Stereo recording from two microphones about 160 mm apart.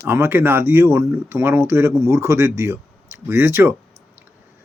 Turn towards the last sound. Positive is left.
turn(degrees=-15)  # may be behind; listen again after turning